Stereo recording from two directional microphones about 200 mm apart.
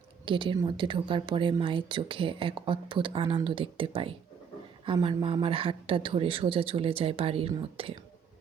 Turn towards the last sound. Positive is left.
turn(degrees=-30)  # may be behind; listen again after turning